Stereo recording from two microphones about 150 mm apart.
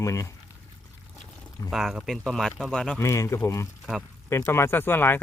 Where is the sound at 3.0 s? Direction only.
20° left (ahead or behind).